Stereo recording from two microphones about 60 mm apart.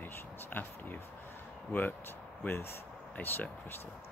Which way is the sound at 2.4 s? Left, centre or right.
Left.